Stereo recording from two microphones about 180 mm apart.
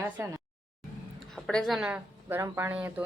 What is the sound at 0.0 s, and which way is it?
Speech, 15° right (ahead or behind).